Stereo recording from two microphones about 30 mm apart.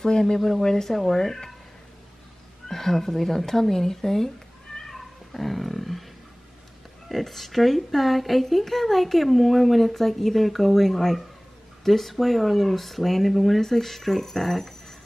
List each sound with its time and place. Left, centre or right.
0.0 s speech: centre
2.7 s speech: centre
4.9 s cat: centre
7.1 s speech: centre
13.6 s speech: centre